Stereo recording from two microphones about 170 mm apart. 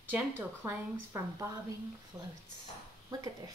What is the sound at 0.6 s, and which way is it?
A woman's voice, 15° right (ahead or behind).